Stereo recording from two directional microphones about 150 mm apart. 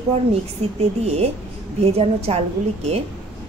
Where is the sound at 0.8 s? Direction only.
45° right (ahead or behind).